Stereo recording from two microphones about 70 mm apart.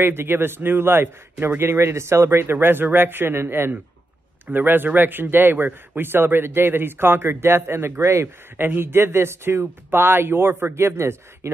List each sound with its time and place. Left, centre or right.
0.0 s a man's voice: right